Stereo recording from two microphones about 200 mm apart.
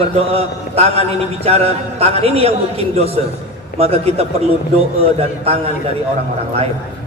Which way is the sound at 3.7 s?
30° right (ahead or behind).